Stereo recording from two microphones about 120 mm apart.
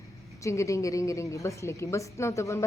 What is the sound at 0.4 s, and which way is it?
A woman's voice, 25° left (ahead or behind).